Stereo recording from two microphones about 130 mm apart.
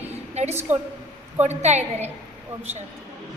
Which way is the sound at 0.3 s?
55° right (ahead or behind).